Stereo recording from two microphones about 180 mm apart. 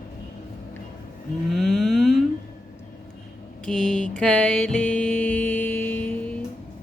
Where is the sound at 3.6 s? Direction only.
5° left (ahead or behind).